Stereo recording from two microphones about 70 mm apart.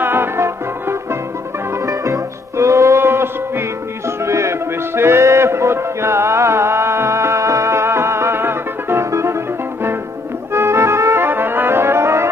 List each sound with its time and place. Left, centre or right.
0.0 s music: right
1.9 s music: right
10.5 s music: right